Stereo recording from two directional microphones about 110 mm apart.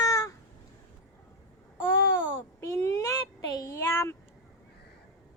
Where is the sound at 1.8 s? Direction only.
25° left (ahead or behind).